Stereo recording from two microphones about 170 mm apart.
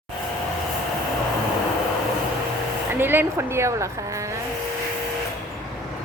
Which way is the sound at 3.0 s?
10° right (ahead or behind).